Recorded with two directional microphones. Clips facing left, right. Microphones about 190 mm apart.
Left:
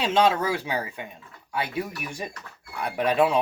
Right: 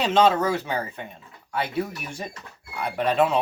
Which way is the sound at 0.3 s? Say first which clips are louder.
Right 2 dB; 10° left (ahead or behind).